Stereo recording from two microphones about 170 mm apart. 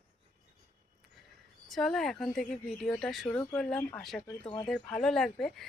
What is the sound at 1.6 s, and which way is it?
Speech, centre (ahead or behind).